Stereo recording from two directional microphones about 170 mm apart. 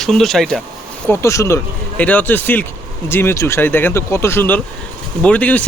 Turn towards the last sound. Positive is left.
turn(degrees=10)  # may be behind; listen again after turning